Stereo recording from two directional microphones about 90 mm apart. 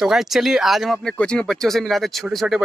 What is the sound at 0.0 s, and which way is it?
Speech, 5° right (ahead or behind).